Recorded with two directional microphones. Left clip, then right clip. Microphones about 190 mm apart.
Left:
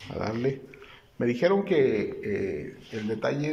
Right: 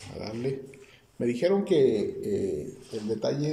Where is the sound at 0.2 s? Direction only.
10° right (ahead or behind); by 2.0 s 25° right (ahead or behind).